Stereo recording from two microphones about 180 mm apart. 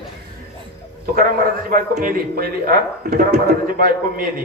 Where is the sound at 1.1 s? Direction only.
55° right (ahead or behind).